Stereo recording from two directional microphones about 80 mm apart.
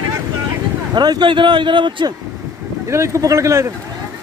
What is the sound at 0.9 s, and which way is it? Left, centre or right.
A man's voice, right.